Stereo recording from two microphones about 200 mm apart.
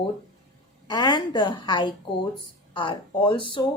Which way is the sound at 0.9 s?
20° left (ahead or behind).